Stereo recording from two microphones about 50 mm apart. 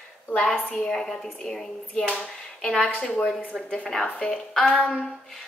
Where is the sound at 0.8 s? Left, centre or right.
Centre.